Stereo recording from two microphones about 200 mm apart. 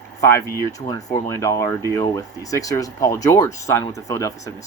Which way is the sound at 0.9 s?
20° left (ahead or behind).